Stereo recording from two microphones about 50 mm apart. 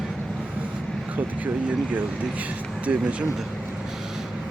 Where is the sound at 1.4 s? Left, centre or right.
Right.